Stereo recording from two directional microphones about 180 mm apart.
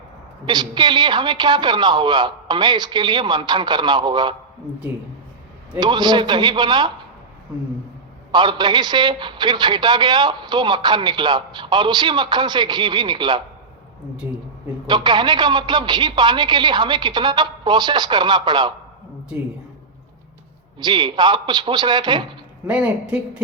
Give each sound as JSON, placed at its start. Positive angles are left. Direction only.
{"t": 0.4, "sound": "a man's voice", "side_deg": -25}
{"t": 5.8, "sound": "a man's voice", "side_deg": -25}
{"t": 8.3, "sound": "a man's voice", "side_deg": -25}
{"t": 14.8, "sound": "a man's voice", "side_deg": -25}
{"t": 20.7, "sound": "a man's voice", "side_deg": -25}
{"t": 22.6, "sound": "speech", "side_deg": -10}